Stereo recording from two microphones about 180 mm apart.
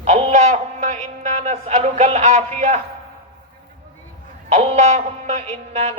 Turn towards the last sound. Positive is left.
turn(degrees=-40)  # may be behind; listen again after turning